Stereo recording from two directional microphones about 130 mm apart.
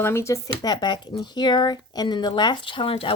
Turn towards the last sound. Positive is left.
turn(degrees=45)  # may be behind; listen again after turning